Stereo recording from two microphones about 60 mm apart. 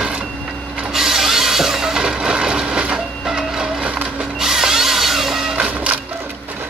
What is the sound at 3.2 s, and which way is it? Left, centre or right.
Printer, centre.